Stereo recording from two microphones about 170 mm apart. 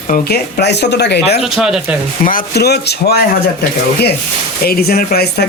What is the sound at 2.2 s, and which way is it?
Speech, 60° left (ahead or behind).